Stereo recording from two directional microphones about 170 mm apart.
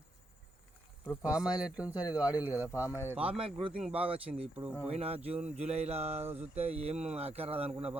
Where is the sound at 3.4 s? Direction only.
35° right (ahead or behind).